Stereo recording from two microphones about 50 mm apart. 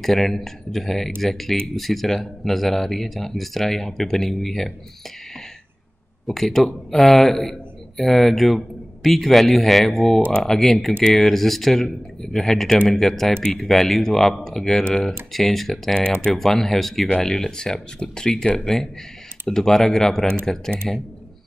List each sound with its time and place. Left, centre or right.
0.0 s speech: centre
6.2 s speech: centre